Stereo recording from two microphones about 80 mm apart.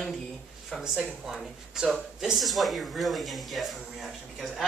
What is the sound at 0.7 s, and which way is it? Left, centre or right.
Speech, centre.